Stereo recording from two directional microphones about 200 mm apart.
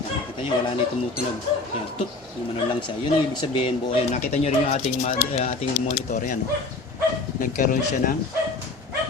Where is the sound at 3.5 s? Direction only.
30° left (ahead or behind).